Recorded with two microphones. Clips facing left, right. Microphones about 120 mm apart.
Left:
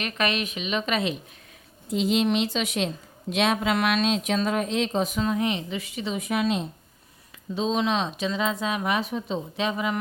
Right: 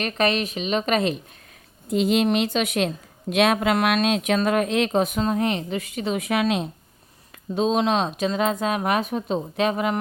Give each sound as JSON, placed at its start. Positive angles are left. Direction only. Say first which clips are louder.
{"t": 0.0, "sound": "a woman's voice", "louder": "right 4 dB", "side_deg": -35}
{"t": 5.2, "sound": "speech", "louder": "right 2 dB", "side_deg": -40}
{"t": 7.5, "sound": "speech", "louder": "right 4 dB", "side_deg": -50}